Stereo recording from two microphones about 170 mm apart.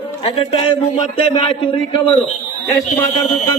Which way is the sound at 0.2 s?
35° left (ahead or behind).